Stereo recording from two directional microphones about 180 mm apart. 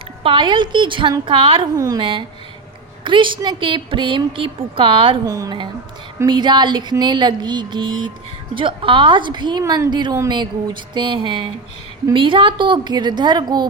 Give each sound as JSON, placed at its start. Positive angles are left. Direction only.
{"t": 0.2, "sound": "a woman's voice", "side_deg": -30}